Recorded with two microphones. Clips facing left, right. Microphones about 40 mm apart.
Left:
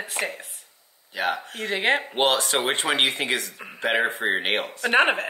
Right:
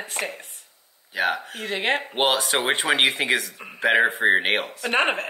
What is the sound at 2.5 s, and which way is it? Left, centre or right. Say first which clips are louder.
Speech: right 1 dB; centre.